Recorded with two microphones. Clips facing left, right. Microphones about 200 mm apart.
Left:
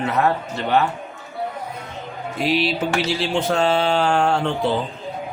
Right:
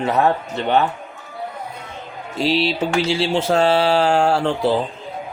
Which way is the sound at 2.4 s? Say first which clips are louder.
Right 2 dB; 30° right (ahead or behind).